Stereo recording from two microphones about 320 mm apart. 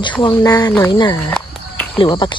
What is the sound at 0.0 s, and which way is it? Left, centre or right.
Speech, centre.